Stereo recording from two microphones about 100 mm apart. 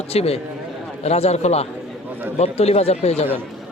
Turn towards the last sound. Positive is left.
turn(degrees=90)